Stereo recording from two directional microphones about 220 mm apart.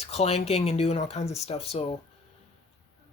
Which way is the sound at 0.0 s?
30° left (ahead or behind).